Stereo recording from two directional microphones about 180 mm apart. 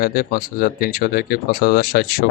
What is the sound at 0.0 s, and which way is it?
Speech, 55° left (ahead or behind).